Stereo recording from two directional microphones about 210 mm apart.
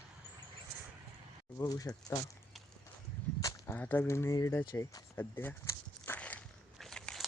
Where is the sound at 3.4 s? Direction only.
15° left (ahead or behind).